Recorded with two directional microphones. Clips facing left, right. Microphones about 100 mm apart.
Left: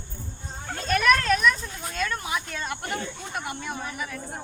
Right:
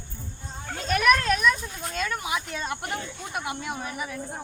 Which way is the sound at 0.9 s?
10° right (ahead or behind).